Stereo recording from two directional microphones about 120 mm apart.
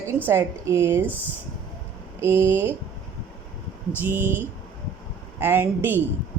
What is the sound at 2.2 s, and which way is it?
Speech, 20° right (ahead or behind).